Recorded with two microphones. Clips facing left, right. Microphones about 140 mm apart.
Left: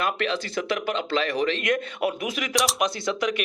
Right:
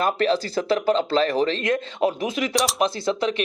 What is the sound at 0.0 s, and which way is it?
A man's voice, 35° right (ahead or behind).